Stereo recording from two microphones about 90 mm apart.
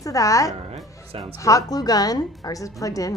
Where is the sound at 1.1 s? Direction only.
90° right.